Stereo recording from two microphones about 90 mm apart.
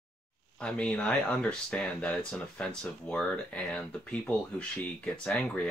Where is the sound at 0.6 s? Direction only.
10° left (ahead or behind).